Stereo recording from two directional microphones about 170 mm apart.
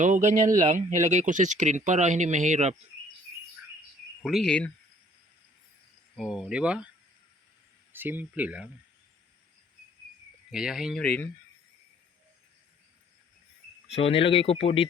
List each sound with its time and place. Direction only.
0.0 s speech: 45° right (ahead or behind)
4.2 s speech: centre (ahead or behind)
6.1 s speech: centre (ahead or behind)
7.9 s speech: 10° right (ahead or behind)
10.5 s speech: 5° right (ahead or behind)
11.0 s speech: 10° left (ahead or behind)
13.9 s speech: 35° left (ahead or behind)